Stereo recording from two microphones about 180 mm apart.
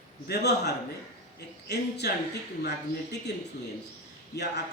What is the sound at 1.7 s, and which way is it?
A man's voice, 70° left (ahead or behind).